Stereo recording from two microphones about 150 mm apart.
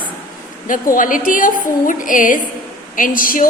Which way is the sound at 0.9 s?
65° left (ahead or behind).